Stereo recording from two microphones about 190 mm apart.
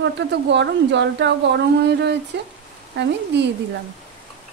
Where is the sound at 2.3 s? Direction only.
65° right (ahead or behind).